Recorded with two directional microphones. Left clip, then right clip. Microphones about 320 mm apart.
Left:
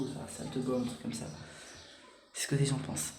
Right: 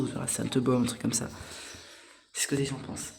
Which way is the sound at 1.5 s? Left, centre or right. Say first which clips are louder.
Right 7 dB; centre.